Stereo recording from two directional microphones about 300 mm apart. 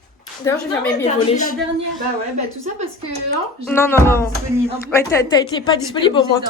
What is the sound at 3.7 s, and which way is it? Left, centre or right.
A woman's voice, centre.